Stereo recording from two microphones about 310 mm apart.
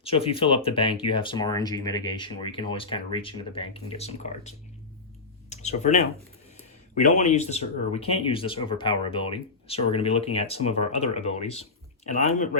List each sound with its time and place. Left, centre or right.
0.0 s speech: centre
5.5 s a sound: left
6.9 s speech: left